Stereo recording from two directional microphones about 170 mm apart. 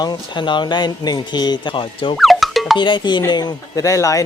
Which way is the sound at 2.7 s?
25° left (ahead or behind).